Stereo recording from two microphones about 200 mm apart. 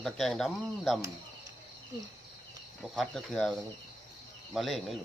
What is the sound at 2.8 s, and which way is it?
Speech, centre (ahead or behind).